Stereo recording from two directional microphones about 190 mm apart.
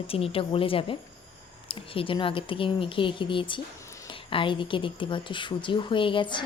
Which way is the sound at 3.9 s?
15° left (ahead or behind).